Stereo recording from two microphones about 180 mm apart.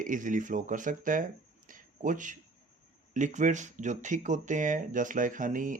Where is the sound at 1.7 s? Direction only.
45° right (ahead or behind).